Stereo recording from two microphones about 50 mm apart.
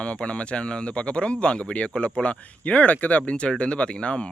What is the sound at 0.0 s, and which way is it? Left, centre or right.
Speech, left.